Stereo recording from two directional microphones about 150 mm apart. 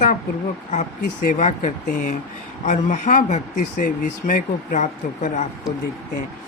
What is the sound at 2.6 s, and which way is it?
Speech, 55° left (ahead or behind).